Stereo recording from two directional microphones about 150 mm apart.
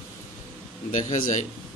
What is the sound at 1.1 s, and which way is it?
Speech, 60° left (ahead or behind).